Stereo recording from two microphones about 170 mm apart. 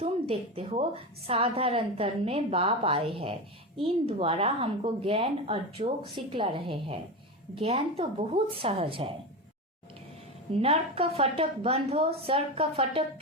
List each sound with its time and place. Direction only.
0.0 s a woman's voice: 35° right (ahead or behind)
10.5 s a woman's voice: 35° right (ahead or behind)